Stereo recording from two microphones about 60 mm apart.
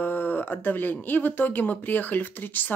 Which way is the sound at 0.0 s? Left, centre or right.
Left.